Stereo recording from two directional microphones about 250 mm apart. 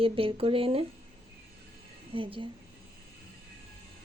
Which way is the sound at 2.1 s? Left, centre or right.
Right.